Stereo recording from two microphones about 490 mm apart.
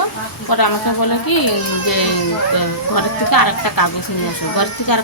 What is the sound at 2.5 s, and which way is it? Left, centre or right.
Speech, left.